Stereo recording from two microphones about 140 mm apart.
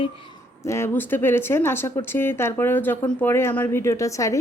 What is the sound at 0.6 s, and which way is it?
Speech, 20° left (ahead or behind).